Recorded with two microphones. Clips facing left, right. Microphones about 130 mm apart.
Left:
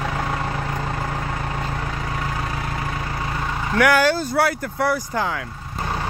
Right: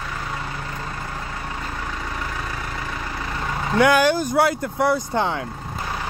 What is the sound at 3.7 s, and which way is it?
Speech, 15° right (ahead or behind).